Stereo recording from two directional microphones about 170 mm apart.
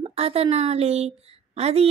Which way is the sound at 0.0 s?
35° right (ahead or behind).